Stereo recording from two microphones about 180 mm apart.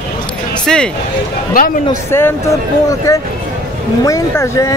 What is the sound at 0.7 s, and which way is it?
Speech, centre (ahead or behind).